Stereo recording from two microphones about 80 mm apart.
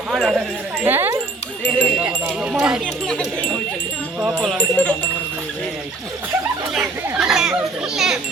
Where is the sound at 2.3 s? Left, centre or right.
Centre.